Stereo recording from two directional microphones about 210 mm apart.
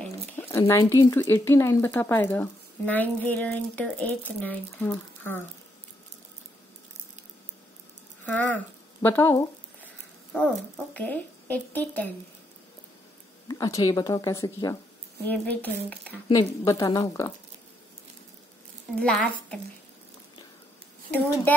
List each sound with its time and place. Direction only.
0.0 s speech: 10° left (ahead or behind)
8.3 s speech: 10° left (ahead or behind)
13.5 s speech: 15° left (ahead or behind)
18.9 s a woman's voice: 5° left (ahead or behind)